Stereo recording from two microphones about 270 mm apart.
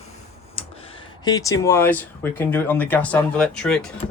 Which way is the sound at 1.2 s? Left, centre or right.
Centre.